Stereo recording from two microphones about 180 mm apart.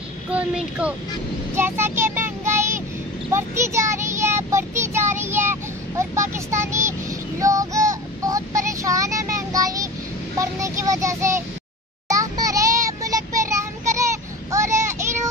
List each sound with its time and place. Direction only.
0.3 s child singing: 5° right (ahead or behind)
1.5 s vehicle: 15° right (ahead or behind)
3.3 s child singing: 15° right (ahead or behind)